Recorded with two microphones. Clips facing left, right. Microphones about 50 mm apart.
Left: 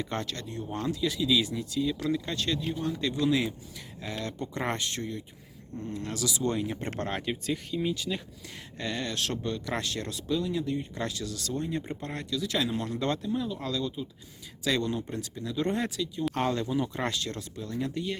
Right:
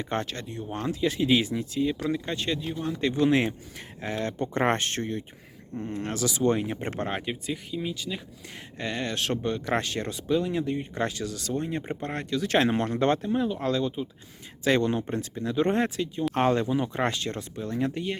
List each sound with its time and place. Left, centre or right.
0.0 s speech: right; by 8.2 s centre
8.8 s speech: right